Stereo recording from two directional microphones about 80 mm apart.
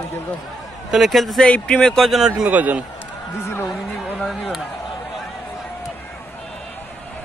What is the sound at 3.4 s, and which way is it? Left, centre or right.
Speech, left.